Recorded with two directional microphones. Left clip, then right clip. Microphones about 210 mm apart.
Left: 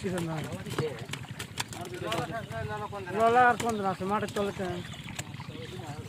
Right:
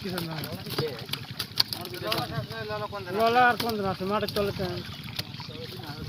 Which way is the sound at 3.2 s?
45° right (ahead or behind).